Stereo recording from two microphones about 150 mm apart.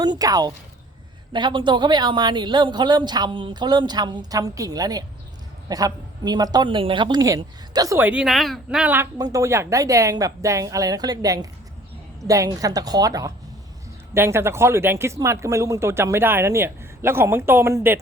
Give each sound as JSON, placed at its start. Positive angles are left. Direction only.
{"t": 0.0, "sound": "speech", "side_deg": -25}
{"t": 7.9, "sound": "speech", "side_deg": -10}
{"t": 9.1, "sound": "speech", "side_deg": -25}